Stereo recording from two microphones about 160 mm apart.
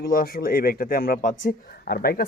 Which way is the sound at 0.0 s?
65° left (ahead or behind).